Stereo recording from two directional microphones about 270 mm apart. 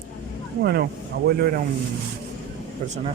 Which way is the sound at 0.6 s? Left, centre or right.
Right.